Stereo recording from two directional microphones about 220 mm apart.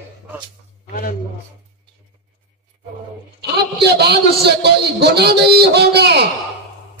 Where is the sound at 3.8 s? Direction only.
45° right (ahead or behind).